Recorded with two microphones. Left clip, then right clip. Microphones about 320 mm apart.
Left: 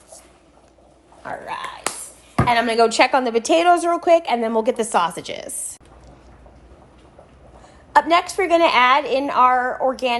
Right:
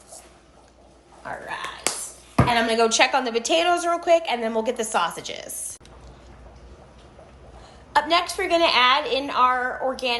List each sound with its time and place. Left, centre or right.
1.2 s whispering: left
2.5 s a woman's voice: centre
7.9 s a woman's voice: left